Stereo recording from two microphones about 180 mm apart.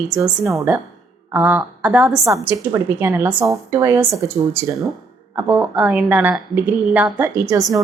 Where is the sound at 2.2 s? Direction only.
15° right (ahead or behind).